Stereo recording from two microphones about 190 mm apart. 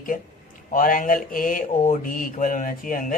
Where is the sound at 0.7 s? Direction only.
45° left (ahead or behind).